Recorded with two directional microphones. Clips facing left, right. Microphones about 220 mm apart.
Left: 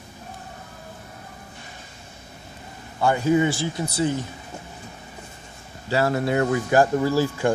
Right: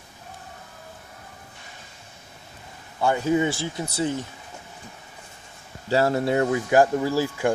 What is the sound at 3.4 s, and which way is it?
Speech, 25° right (ahead or behind).